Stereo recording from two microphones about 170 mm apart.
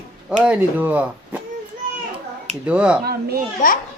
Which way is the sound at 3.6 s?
50° left (ahead or behind).